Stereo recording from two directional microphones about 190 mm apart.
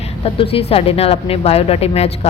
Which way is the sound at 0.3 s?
30° left (ahead or behind).